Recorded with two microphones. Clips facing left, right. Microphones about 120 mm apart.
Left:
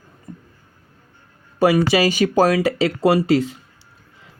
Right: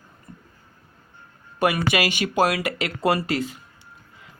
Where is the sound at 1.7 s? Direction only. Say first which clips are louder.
Left 7 dB; 35° left (ahead or behind).